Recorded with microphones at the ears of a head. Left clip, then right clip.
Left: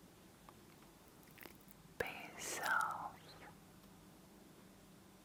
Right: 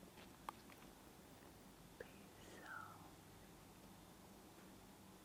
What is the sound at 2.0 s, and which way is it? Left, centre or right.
Whispering, left.